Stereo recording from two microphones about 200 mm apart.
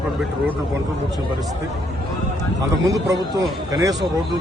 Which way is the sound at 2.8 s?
20° right (ahead or behind).